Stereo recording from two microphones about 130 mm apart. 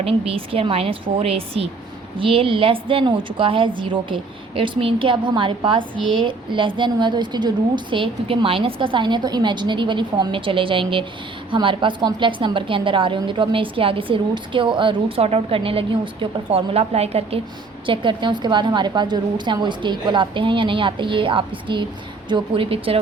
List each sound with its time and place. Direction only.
0.0 s a woman's voice: 45° right (ahead or behind)
17.8 s a woman's voice: 40° right (ahead or behind)